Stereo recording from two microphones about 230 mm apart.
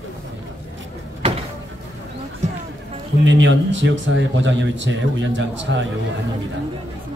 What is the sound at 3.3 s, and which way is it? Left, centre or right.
A man's voice, right.